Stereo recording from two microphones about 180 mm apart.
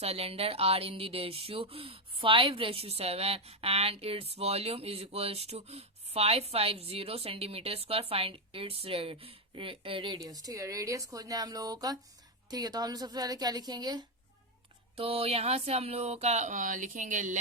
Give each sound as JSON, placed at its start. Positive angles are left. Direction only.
{"t": 0.0, "sound": "a woman's voice", "side_deg": -35}
{"t": 14.9, "sound": "speech", "side_deg": -35}